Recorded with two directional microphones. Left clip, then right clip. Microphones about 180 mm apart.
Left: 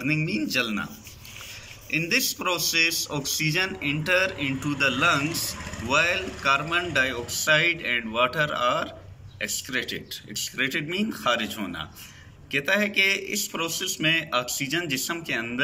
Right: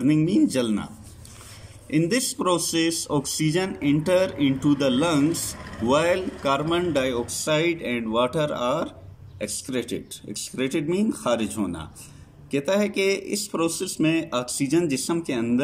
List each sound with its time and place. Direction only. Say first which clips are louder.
0.0 s a man's voice: right 6 dB; 35° right (ahead or behind)
1.9 s a man's voice: even; 35° right (ahead or behind)